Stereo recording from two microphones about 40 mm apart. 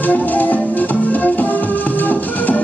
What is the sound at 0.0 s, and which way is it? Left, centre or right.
Music, left.